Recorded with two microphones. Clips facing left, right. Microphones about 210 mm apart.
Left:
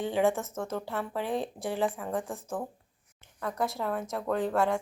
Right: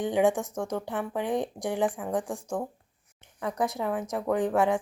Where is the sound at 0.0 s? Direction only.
15° right (ahead or behind).